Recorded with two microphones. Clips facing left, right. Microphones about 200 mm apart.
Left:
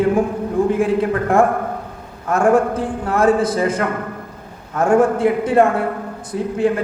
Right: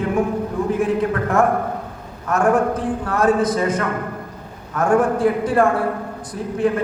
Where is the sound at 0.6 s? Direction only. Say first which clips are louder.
Left 6 dB; 30° left (ahead or behind).